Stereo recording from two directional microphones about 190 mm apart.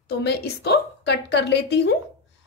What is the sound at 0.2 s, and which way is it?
A woman's voice, 60° left (ahead or behind).